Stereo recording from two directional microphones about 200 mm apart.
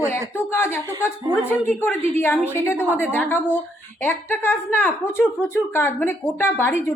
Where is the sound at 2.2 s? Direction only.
10° left (ahead or behind).